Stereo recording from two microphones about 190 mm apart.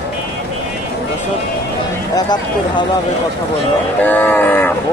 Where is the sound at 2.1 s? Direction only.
20° left (ahead or behind).